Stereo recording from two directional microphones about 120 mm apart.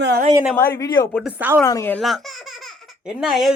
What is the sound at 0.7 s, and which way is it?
Speech, 35° left (ahead or behind).